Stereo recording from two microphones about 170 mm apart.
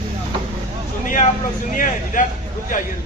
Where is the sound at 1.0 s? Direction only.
50° left (ahead or behind).